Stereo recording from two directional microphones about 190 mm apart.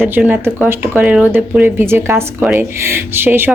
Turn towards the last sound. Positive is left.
turn(degrees=-10)  # may be behind; listen again after turning